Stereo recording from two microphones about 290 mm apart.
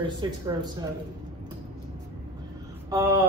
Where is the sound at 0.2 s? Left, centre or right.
Centre.